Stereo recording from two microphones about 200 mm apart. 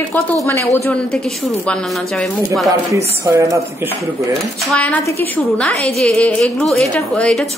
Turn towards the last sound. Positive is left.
turn(degrees=5)  # may be behind; listen again after turning